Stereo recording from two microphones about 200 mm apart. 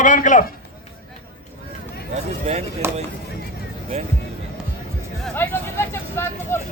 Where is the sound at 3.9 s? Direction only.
35° right (ahead or behind).